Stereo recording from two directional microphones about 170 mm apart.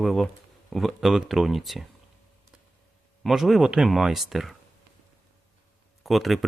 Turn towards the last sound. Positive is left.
turn(degrees=0)  # may be behind; listen again after turning